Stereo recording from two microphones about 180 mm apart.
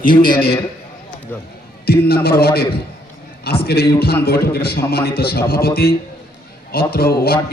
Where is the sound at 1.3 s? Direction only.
10° left (ahead or behind).